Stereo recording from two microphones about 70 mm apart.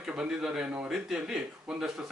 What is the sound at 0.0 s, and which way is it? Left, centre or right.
Speech, centre.